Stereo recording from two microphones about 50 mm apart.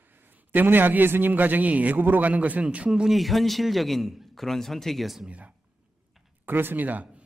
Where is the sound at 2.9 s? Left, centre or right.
Centre.